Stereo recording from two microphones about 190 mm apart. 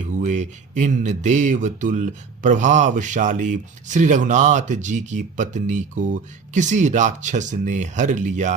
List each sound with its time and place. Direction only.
0.2 s speech: 40° right (ahead or behind)